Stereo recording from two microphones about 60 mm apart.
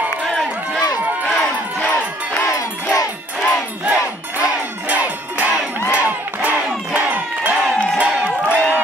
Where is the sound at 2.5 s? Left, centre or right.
Left.